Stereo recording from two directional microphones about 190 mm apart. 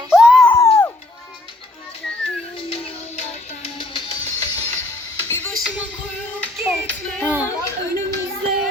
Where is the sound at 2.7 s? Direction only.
30° left (ahead or behind).